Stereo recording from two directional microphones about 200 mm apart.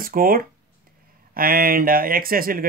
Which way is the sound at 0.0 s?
45° right (ahead or behind).